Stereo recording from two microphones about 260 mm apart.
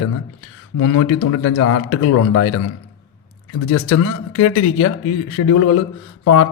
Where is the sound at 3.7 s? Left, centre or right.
Left.